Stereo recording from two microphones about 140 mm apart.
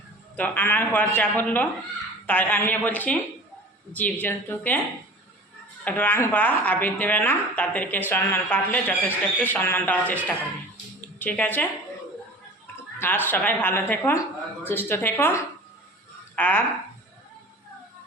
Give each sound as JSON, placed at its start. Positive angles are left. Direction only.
{"t": 0.3, "sound": "a woman's voice", "side_deg": 10}
{"t": 5.8, "sound": "a woman's voice", "side_deg": 15}
{"t": 12.7, "sound": "a woman's voice", "side_deg": 15}